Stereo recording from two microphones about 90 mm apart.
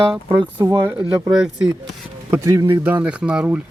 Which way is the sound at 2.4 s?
35° right (ahead or behind).